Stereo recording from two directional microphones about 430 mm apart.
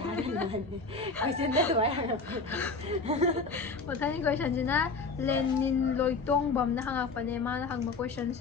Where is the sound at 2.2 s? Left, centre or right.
Centre.